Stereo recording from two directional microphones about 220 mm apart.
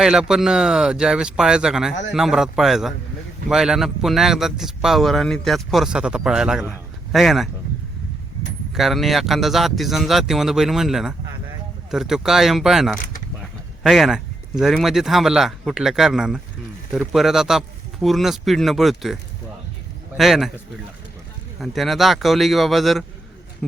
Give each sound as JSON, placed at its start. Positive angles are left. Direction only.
{"t": 0.0, "sound": "a man's voice", "side_deg": -5}
{"t": 8.7, "sound": "a man's voice", "side_deg": 0}
{"t": 21.6, "sound": "a man's voice", "side_deg": 0}